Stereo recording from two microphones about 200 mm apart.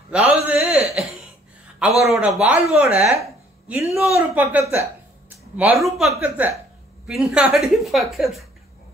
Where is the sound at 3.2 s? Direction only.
15° right (ahead or behind).